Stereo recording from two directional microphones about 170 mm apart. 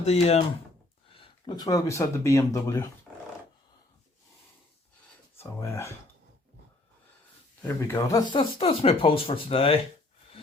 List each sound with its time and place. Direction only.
0.0 s speech: 40° left (ahead or behind); by 2.9 s 20° left (ahead or behind)
5.4 s speech: 15° left (ahead or behind)
7.6 s speech: 15° left (ahead or behind); by 9.8 s 35° left (ahead or behind)